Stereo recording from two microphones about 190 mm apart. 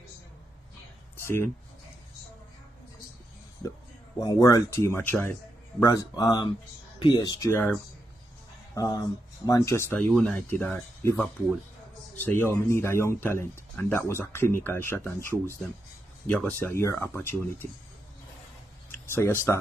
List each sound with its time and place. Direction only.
1.2 s speech: 10° left (ahead or behind)
4.2 s speech: 20° left (ahead or behind)
8.7 s speech: 20° left (ahead or behind)
16.3 s speech: 5° left (ahead or behind)
18.9 s speech: 10° left (ahead or behind)